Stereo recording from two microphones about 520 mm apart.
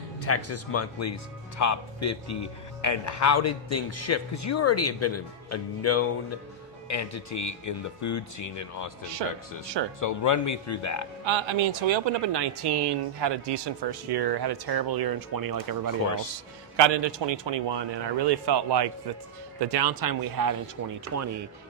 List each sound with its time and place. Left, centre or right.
0.2 s speech: left
9.2 s speech: right
10.0 s speech: left
11.3 s speech: right
16.7 s speech: right